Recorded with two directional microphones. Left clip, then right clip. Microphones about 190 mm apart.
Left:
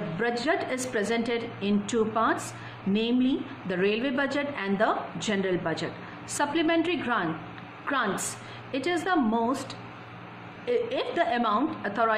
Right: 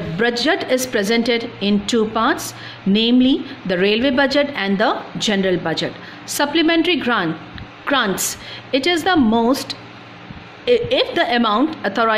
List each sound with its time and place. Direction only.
0.2 s a woman's voice: 50° right (ahead or behind)